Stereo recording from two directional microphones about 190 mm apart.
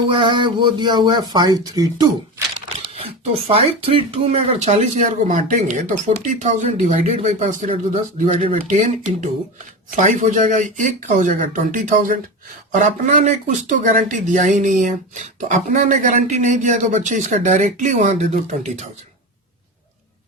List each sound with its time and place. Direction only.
0.1 s speech: 25° right (ahead or behind)
2.9 s speech: 30° right (ahead or behind)